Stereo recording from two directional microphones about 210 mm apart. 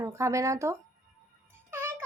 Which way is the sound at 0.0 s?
15° right (ahead or behind).